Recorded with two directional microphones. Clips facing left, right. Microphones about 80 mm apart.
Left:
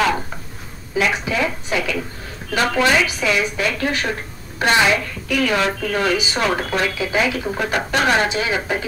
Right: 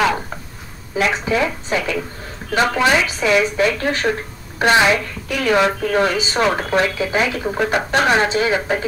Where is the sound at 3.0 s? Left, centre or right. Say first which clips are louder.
Right 3 dB; right.